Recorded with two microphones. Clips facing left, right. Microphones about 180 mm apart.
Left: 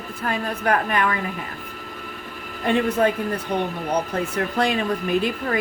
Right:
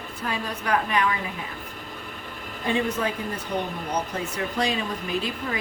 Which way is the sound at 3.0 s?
65° left (ahead or behind).